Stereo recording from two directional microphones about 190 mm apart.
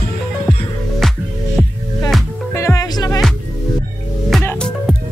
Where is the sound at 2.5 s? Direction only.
15° left (ahead or behind).